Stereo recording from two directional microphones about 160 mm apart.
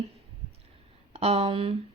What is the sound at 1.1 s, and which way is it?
Speech, 40° right (ahead or behind).